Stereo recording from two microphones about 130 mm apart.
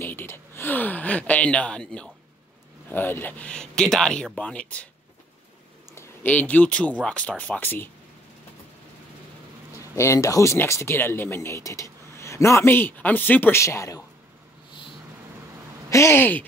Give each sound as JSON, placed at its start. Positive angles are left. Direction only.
{"t": 0.0, "sound": "a sound", "side_deg": 15}
{"t": 2.9, "sound": "speech", "side_deg": 15}
{"t": 5.9, "sound": "speech", "side_deg": 10}
{"t": 9.8, "sound": "speech", "side_deg": 25}
{"t": 15.9, "sound": "speech", "side_deg": 20}